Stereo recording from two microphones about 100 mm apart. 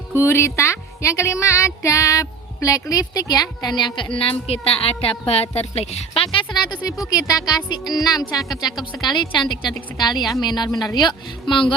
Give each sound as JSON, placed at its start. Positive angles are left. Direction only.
{"t": 0.2, "sound": "speech", "side_deg": 25}
{"t": 6.3, "sound": "a woman's voice", "side_deg": 45}